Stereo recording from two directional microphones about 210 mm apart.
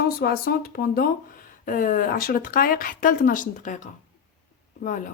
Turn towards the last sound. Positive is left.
turn(degrees=40)  # may be behind; listen again after turning